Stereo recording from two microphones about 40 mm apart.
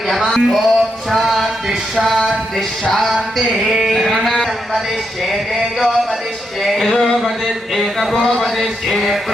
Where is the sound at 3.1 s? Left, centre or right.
Centre.